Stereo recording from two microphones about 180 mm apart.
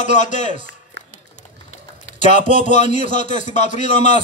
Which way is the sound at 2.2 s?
40° left (ahead or behind).